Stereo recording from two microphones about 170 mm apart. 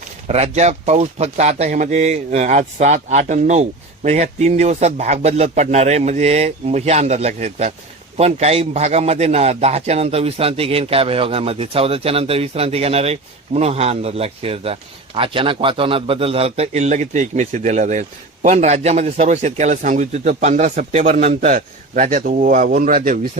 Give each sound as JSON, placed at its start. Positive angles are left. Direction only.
{"t": 0.3, "sound": "a man's voice", "side_deg": -40}